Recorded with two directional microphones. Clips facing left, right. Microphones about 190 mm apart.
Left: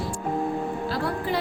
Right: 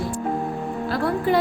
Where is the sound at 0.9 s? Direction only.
55° right (ahead or behind).